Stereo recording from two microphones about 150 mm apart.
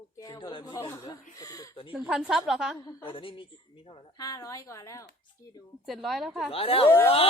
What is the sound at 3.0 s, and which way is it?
Speech, 35° left (ahead or behind).